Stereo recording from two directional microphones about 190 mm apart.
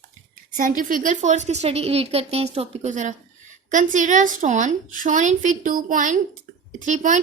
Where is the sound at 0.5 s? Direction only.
45° right (ahead or behind).